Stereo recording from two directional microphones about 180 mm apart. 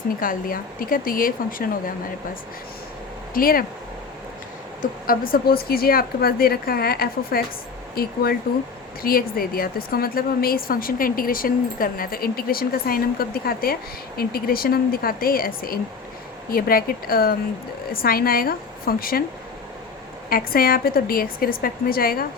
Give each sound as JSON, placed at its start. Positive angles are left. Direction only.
{"t": 0.2, "sound": "speech", "side_deg": 50}
{"t": 3.3, "sound": "speech", "side_deg": 55}
{"t": 4.8, "sound": "a woman's voice", "side_deg": 55}
{"t": 20.3, "sound": "a woman's voice", "side_deg": 55}